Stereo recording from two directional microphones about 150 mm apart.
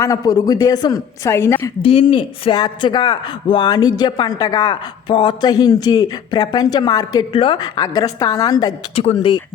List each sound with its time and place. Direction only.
0.0 s speech: 25° left (ahead or behind)
1.8 s speech: 35° left (ahead or behind)